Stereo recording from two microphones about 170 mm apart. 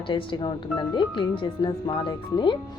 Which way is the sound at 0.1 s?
30° left (ahead or behind).